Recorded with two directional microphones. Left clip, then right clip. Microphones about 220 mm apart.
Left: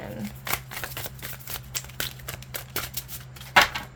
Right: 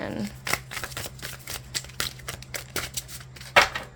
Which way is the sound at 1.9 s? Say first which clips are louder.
Right 2 dB; 5° right (ahead or behind).